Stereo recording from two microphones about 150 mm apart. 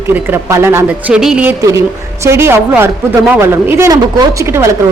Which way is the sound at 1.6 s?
20° right (ahead or behind).